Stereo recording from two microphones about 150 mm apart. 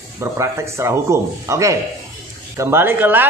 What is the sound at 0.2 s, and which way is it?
A man's voice, 20° right (ahead or behind).